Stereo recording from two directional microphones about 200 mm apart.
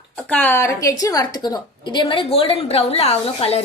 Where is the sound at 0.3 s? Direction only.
10° left (ahead or behind).